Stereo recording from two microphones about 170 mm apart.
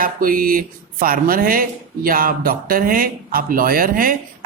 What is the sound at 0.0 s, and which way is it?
Speech, 55° right (ahead or behind).